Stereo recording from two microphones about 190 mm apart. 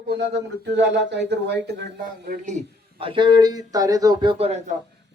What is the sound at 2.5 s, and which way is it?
Speech, 35° right (ahead or behind).